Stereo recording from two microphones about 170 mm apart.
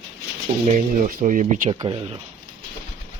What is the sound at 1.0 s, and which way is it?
Speech, 50° right (ahead or behind).